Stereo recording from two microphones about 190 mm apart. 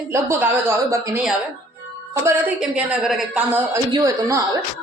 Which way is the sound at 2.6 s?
5° right (ahead or behind).